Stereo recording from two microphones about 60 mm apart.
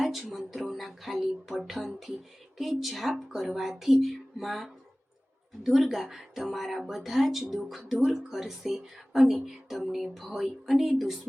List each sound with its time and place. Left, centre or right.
0.0 s music: centre
2.6 s speech: centre